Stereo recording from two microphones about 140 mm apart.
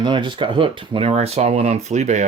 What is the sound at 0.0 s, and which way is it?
Speech, 35° right (ahead or behind).